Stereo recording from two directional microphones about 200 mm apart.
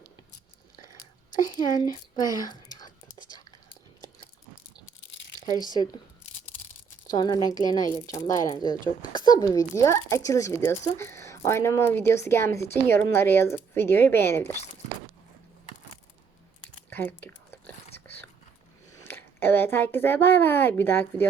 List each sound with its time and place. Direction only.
1.5 s speech: 20° left (ahead or behind)
7.1 s a woman's voice: 20° left (ahead or behind)
16.9 s a sound: 10° left (ahead or behind)
17.9 s biting: 10° left (ahead or behind)
19.0 s speech: 10° left (ahead or behind)